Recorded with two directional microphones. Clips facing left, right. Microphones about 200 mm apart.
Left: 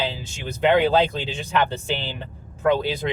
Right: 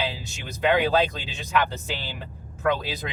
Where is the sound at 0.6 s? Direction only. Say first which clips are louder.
Left 3 dB; 25° left (ahead or behind).